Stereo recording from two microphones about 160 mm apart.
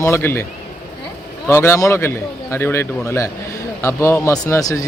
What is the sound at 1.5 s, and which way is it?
Speech, 15° left (ahead or behind).